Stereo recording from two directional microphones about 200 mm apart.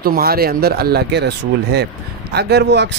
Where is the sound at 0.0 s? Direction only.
50° right (ahead or behind).